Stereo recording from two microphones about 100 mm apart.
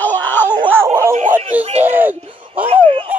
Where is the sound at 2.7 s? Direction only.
70° right (ahead or behind).